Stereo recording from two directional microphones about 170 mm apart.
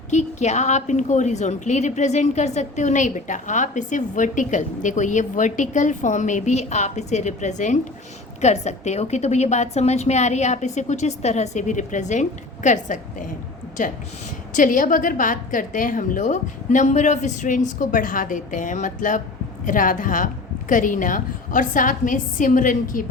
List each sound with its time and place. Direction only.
0.1 s a woman's voice: 45° left (ahead or behind)
14.5 s a woman's voice: 50° left (ahead or behind)